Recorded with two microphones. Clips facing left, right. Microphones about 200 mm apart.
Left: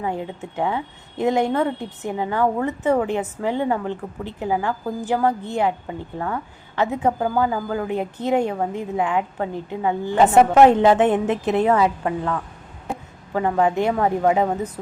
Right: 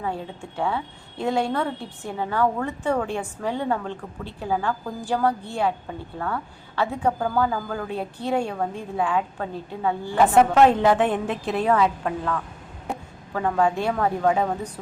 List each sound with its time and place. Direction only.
0.0 s a woman's voice: 15° left (ahead or behind)